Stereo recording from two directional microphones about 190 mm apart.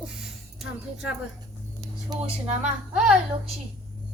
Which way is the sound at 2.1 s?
20° right (ahead or behind).